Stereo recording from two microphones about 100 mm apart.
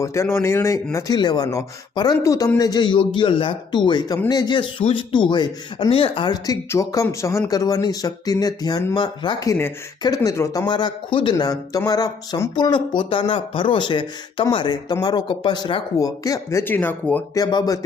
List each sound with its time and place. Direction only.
0.0 s speech: 30° left (ahead or behind)
0.9 s speech: 40° left (ahead or behind)
5.9 s speech: 75° left (ahead or behind)
6.2 s speech: 40° left (ahead or behind)
9.5 s speech: 20° left (ahead or behind)
10.7 s speech: 50° left (ahead or behind)
16.0 s speech: 35° left (ahead or behind); by 17.2 s 20° left (ahead or behind)
17.3 s speech: 40° left (ahead or behind)